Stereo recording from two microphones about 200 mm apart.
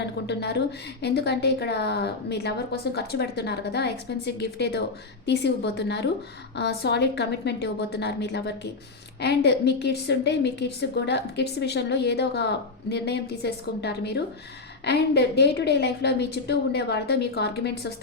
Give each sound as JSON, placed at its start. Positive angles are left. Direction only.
{"t": 0.0, "sound": "a woman's voice", "side_deg": 60}